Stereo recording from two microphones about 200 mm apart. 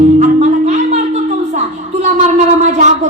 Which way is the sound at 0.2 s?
35° right (ahead or behind).